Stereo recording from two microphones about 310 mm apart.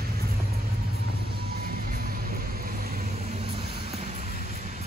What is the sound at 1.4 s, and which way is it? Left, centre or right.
Vehicle, right.